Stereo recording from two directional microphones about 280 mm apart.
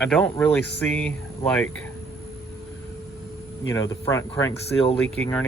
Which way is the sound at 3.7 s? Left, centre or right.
Centre.